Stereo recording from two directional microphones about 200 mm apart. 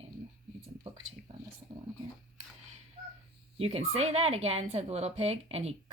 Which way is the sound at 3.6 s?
30° right (ahead or behind).